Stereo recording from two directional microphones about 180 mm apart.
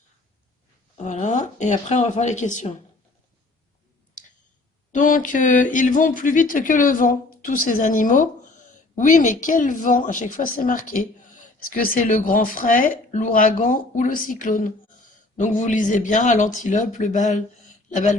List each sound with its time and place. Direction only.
0.9 s speech: 40° left (ahead or behind)
4.9 s speech: 45° left (ahead or behind)